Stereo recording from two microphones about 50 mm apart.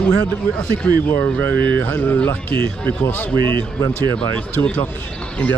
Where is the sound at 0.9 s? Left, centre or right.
Left.